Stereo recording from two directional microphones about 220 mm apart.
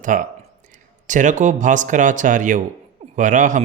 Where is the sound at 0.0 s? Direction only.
35° right (ahead or behind).